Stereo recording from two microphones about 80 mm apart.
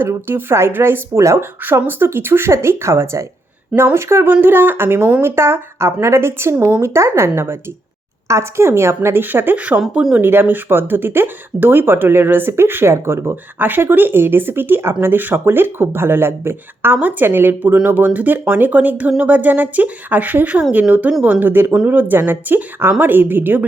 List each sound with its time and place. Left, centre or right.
0.0 s speech: right
6.7 s speech: right
6.9 s speech: right
9.9 s speech: centre
10.2 s speech: right